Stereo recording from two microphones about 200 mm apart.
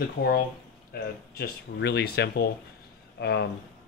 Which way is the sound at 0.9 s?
50° left (ahead or behind).